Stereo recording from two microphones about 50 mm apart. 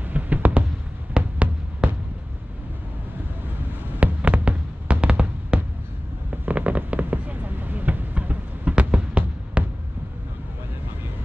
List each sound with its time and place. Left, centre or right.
0.1 s a sound: right
1.1 s heart sounds: right
4.0 s heart sounds: right
6.4 s fireworks: right